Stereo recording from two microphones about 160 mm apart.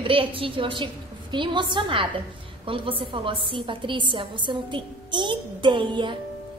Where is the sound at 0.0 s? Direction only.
35° right (ahead or behind).